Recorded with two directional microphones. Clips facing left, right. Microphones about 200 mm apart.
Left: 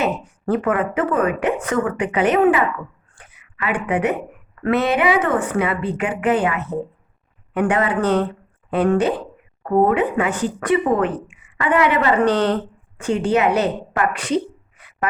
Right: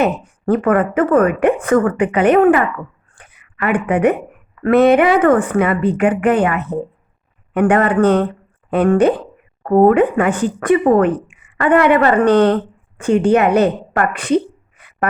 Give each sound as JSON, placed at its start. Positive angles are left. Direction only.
{"t": 0.0, "sound": "a woman's voice", "side_deg": -55}
{"t": 3.2, "sound": "a sound", "side_deg": -55}
{"t": 4.6, "sound": "speech", "side_deg": -55}